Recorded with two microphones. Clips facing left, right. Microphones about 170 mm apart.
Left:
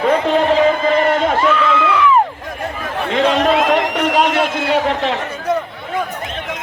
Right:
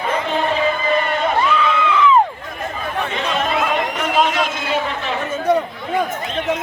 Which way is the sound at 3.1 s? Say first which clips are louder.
Left 10 dB; 90° left.